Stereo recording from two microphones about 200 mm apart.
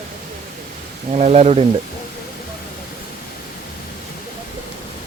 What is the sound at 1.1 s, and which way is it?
Speech, 30° right (ahead or behind).